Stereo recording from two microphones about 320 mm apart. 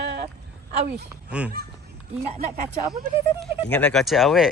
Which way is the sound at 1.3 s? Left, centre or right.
Centre.